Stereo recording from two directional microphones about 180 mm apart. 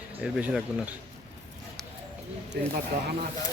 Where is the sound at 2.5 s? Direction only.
60° right (ahead or behind).